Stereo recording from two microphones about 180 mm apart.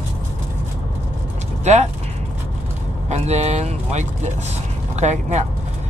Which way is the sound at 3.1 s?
40° right (ahead or behind).